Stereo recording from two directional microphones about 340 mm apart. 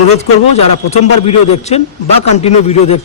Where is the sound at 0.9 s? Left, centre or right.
Centre.